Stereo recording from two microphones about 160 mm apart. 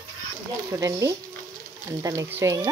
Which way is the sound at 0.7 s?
20° right (ahead or behind).